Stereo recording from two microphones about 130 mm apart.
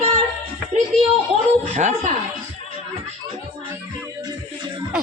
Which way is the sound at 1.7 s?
65° right (ahead or behind).